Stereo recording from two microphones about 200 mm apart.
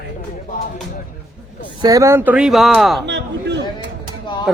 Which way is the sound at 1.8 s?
15° right (ahead or behind).